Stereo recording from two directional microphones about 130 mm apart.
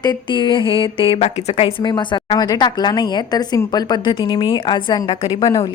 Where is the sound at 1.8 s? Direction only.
35° left (ahead or behind).